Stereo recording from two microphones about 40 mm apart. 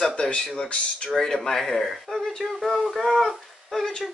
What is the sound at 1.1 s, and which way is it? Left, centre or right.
A woman's voice, centre.